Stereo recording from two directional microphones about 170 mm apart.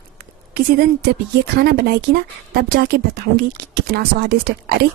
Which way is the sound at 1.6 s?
65° right (ahead or behind).